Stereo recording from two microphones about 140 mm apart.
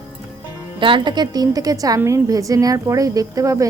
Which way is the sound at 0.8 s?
35° right (ahead or behind).